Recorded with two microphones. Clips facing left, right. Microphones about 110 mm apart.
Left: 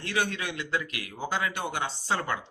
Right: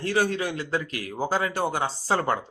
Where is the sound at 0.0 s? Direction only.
35° right (ahead or behind).